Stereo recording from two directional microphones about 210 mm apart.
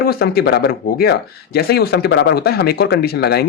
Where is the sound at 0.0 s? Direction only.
45° left (ahead or behind).